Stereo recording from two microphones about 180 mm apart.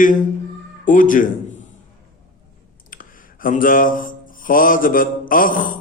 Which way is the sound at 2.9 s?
50° left (ahead or behind).